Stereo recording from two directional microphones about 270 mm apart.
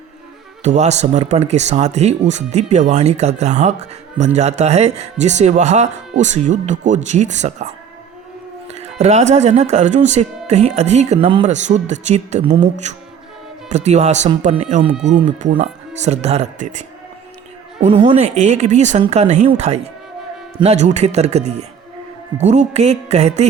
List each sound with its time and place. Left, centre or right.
0.6 s speech: right